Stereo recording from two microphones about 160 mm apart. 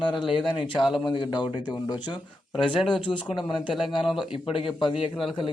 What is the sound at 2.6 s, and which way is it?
Speech, 30° left (ahead or behind).